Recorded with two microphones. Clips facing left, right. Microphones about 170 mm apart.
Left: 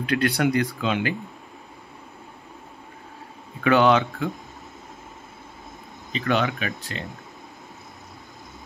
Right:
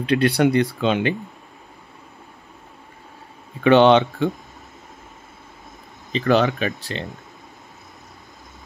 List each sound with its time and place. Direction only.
0.0 s speech: 25° right (ahead or behind)
3.6 s speech: 25° right (ahead or behind)
6.1 s speech: 35° right (ahead or behind)